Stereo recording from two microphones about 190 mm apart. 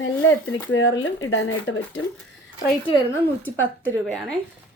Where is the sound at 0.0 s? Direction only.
90° left.